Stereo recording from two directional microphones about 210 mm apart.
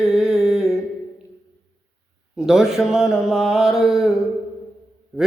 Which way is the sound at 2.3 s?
Centre (ahead or behind).